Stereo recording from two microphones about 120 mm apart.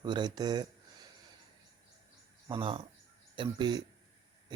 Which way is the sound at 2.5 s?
50° right (ahead or behind).